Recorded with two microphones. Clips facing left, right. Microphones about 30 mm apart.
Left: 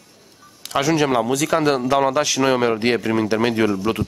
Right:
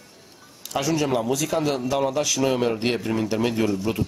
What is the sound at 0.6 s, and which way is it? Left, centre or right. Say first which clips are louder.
Speech: left 5 dB; left.